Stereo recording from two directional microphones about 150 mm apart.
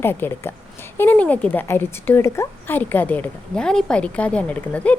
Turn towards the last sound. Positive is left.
turn(degrees=10)  # may be behind; listen again after turning